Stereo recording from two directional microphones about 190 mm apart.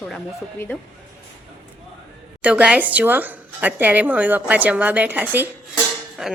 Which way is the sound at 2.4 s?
5° right (ahead or behind).